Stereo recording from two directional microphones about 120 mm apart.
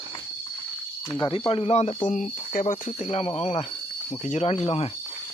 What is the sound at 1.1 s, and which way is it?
Speech, 40° left (ahead or behind).